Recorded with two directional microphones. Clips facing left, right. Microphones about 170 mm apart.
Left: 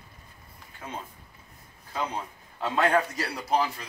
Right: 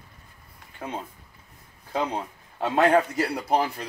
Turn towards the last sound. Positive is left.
turn(degrees=-55)  # may be behind; listen again after turning